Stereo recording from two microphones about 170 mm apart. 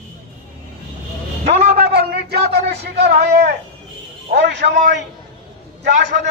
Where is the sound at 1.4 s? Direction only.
40° right (ahead or behind).